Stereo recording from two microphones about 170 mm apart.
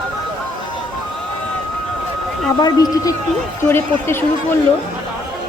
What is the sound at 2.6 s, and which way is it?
Speech, 20° left (ahead or behind).